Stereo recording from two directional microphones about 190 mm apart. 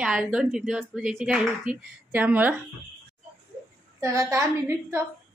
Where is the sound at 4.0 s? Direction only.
15° right (ahead or behind).